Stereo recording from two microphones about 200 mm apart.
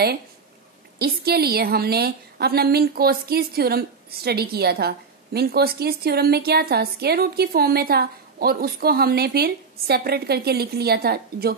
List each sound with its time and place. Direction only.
0.9 s a woman's voice: 50° right (ahead or behind)